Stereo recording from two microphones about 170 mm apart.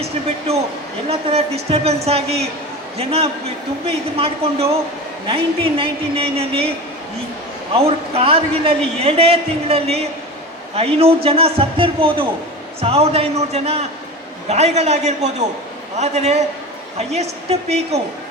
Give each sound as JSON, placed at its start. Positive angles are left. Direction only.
{"t": 1.0, "sound": "a man's voice", "side_deg": -35}
{"t": 7.8, "sound": "a man's voice", "side_deg": -35}